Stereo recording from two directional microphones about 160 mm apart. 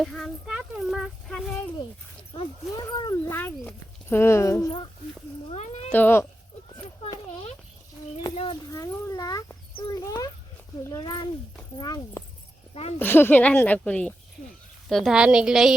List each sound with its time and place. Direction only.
0.0 s a sound: centre (ahead or behind)
2.3 s speech: 30° left (ahead or behind)
2.8 s speech: 20° left (ahead or behind)
5.5 s speech: 40° left (ahead or behind)
5.9 s speech: 10° left (ahead or behind)
8.7 s a child's voice: 20° left (ahead or behind); by 15.7 s 5° right (ahead or behind)